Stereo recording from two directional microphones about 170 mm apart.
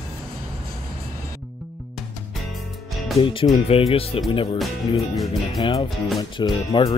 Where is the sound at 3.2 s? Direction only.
30° left (ahead or behind).